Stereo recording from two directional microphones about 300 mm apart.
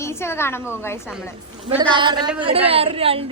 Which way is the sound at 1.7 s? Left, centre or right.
Centre.